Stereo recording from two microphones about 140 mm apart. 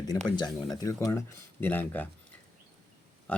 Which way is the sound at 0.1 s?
30° left (ahead or behind).